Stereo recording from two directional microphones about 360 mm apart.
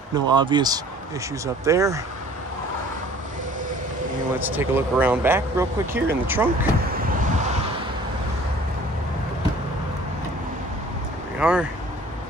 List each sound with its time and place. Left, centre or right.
0.1 s speech: centre
4.4 s speech: centre
6.8 s vehicle: right
11.3 s speech: centre